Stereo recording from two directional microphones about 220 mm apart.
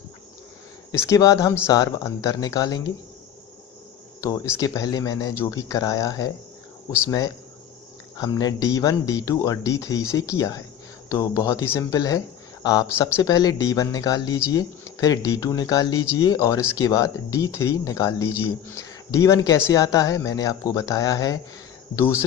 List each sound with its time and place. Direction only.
0.9 s speech: 15° left (ahead or behind)
4.6 s speech: 15° left (ahead or behind)
8.1 s speech: 15° left (ahead or behind)